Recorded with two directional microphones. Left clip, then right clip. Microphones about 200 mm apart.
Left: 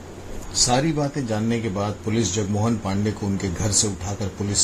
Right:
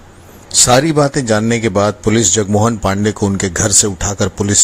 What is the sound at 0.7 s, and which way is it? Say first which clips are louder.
A man's voice: right 14 dB; 35° right (ahead or behind).